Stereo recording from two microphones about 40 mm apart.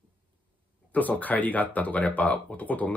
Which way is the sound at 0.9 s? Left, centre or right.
Left.